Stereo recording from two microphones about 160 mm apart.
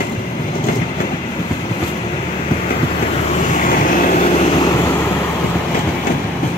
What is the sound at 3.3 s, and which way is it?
Vehicle, 55° left (ahead or behind).